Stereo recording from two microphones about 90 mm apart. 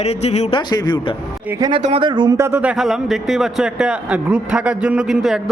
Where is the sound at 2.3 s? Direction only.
30° right (ahead or behind).